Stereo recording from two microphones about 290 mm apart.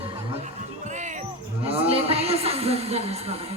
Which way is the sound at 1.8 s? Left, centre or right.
Centre.